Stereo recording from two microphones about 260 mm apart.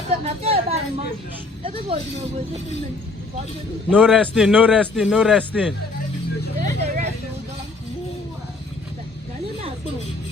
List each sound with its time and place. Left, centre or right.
0.3 s speech: right
3.8 s a man's voice: centre
6.6 s vehicle: right